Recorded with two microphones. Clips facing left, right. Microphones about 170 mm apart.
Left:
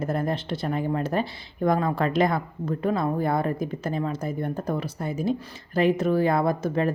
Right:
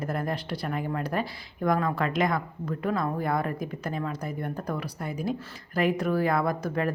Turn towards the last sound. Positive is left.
turn(degrees=25)  # may be behind; listen again after turning